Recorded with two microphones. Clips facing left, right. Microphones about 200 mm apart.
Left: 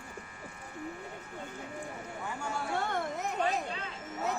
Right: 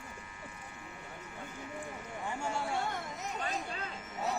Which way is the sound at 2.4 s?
25° right (ahead or behind).